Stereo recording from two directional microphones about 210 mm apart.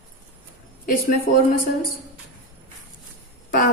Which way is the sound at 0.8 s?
40° left (ahead or behind).